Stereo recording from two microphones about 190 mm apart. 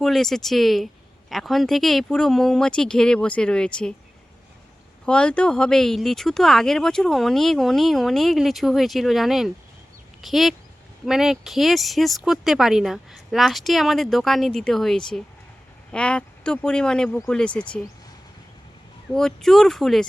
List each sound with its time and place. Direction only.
0.0 s speech: centre (ahead or behind)
5.0 s speech: 5° left (ahead or behind)
19.1 s speech: centre (ahead or behind)